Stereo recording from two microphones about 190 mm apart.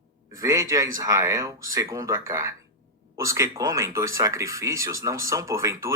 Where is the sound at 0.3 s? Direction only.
15° right (ahead or behind).